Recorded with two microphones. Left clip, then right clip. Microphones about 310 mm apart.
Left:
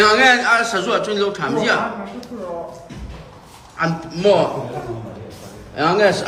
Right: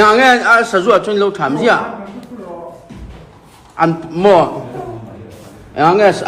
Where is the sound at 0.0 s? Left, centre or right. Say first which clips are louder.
Right 4 dB; centre.